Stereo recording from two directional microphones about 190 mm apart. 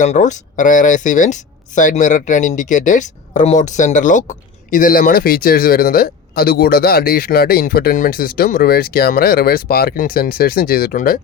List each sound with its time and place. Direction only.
0.0 s speech: 40° left (ahead or behind)